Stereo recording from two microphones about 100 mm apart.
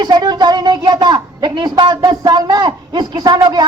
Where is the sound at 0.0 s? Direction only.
45° right (ahead or behind).